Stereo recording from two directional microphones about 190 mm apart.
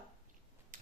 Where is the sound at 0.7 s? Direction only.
45° right (ahead or behind).